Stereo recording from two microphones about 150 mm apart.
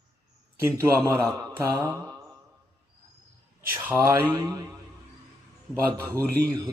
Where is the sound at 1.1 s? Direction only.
20° right (ahead or behind).